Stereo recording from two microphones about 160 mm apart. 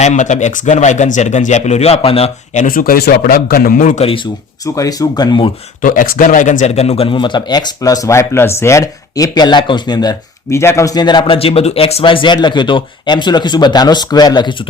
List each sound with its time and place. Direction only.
0.0 s speech: 50° left (ahead or behind)
4.0 s speech: 35° left (ahead or behind)
4.6 s speech: 20° left (ahead or behind)
5.8 s speech: 60° left (ahead or behind); by 14.5 s 25° left (ahead or behind)